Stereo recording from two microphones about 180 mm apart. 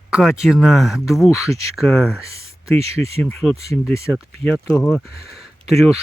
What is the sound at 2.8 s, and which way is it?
Speech, 35° right (ahead or behind).